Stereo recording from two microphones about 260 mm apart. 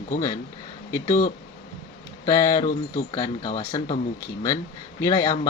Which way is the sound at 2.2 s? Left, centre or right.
Centre.